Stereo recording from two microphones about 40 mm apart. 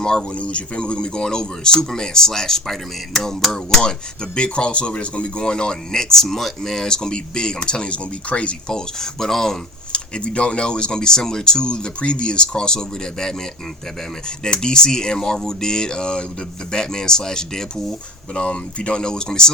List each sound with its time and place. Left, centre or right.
0.0 s speech: centre
0.3 s a man's voice: left
8.7 s speech: centre
9.9 s a man's voice: left
18.3 s a man's voice: left